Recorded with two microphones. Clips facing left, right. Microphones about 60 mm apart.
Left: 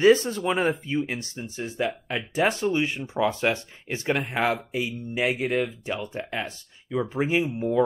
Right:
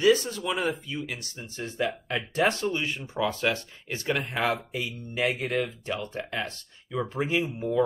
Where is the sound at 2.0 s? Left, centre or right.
Centre.